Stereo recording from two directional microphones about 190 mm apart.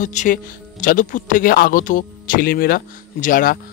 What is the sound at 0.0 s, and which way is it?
Speech, 40° left (ahead or behind).